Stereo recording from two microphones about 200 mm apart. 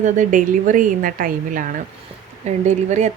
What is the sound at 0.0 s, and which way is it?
Speech, 40° right (ahead or behind).